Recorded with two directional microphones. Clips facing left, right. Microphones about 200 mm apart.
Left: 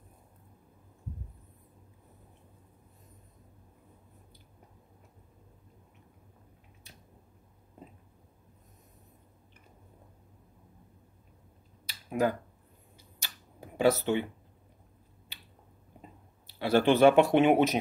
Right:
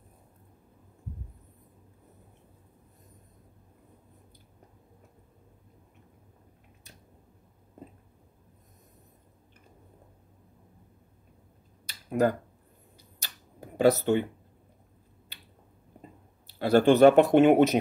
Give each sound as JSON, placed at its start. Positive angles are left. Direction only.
{"t": 12.1, "sound": "speech", "side_deg": -45}
{"t": 13.2, "sound": "a sound", "side_deg": -40}
{"t": 16.5, "sound": "speech", "side_deg": -45}